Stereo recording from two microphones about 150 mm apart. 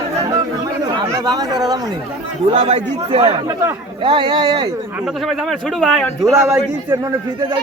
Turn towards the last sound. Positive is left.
turn(degrees=-20)  # may be behind; listen again after turning